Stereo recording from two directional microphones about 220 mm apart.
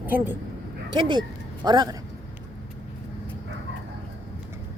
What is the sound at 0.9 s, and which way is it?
Speech, 20° right (ahead or behind).